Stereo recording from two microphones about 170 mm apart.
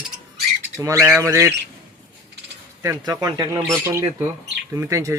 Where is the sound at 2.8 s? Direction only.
20° right (ahead or behind).